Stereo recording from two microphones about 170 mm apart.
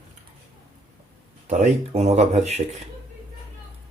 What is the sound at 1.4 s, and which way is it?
Speech, 45° right (ahead or behind).